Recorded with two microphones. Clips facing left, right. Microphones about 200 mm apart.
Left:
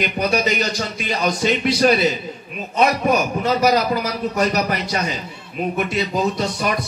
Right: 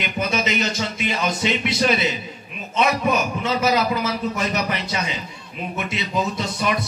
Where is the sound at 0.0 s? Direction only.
40° left (ahead or behind).